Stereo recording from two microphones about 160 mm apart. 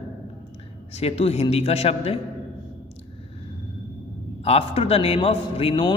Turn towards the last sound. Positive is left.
turn(degrees=35)  # may be behind; listen again after turning